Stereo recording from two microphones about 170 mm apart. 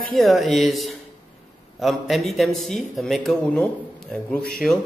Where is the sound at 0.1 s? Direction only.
Centre (ahead or behind).